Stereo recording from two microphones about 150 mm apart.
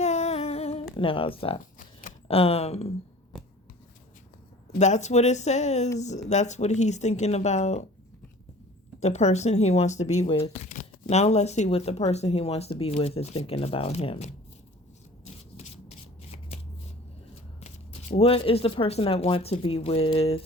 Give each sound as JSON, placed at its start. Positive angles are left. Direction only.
{"t": 0.0, "sound": "humming", "side_deg": 50}
{"t": 0.9, "sound": "speech", "side_deg": 35}
{"t": 1.8, "sound": "a sound", "side_deg": 65}
{"t": 2.2, "sound": "speech", "side_deg": 40}
{"t": 4.8, "sound": "speech", "side_deg": 50}
{"t": 9.0, "sound": "speech", "side_deg": 50}
{"t": 15.2, "sound": "rub", "side_deg": 45}
{"t": 18.1, "sound": "speech", "side_deg": 40}